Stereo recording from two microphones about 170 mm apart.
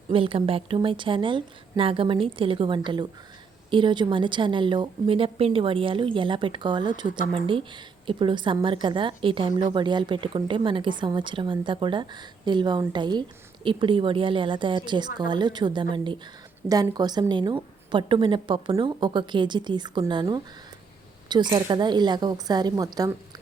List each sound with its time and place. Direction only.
0.1 s a woman's voice: 30° right (ahead or behind)